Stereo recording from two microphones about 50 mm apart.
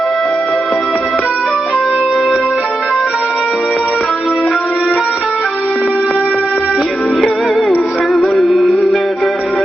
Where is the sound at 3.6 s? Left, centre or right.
Centre.